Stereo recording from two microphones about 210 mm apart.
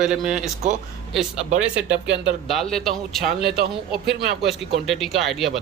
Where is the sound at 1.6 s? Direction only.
5° right (ahead or behind).